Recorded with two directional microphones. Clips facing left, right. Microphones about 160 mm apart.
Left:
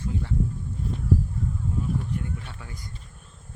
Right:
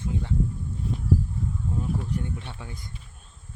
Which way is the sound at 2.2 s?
25° right (ahead or behind).